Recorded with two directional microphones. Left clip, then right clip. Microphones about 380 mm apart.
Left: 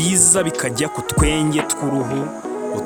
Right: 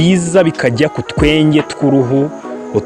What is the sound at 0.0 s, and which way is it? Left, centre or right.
Speech, left.